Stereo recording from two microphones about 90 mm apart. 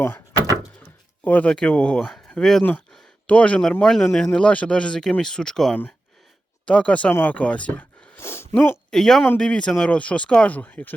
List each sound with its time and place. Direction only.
0.8 s speech: 20° left (ahead or behind)
8.2 s a sound: 30° left (ahead or behind)
8.9 s speech: 5° left (ahead or behind)